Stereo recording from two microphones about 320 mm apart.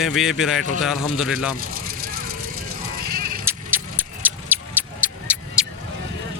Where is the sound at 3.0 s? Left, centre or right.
Right.